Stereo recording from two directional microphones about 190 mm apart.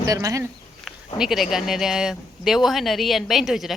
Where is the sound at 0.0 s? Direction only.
15° right (ahead or behind).